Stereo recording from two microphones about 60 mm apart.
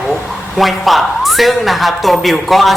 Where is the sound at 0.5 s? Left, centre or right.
Centre.